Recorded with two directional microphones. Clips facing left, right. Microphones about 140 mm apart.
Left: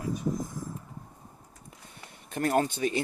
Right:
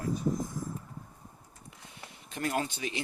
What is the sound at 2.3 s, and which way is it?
Speech, 50° left (ahead or behind).